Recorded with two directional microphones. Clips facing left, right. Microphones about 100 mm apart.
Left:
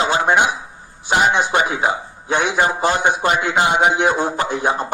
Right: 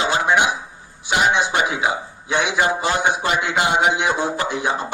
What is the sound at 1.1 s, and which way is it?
A man's voice, 40° left (ahead or behind).